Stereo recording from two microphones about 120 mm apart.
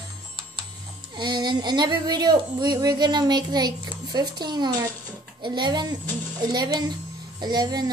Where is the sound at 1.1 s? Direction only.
40° right (ahead or behind).